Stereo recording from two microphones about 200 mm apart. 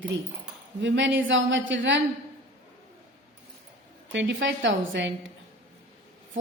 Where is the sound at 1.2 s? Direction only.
70° right (ahead or behind).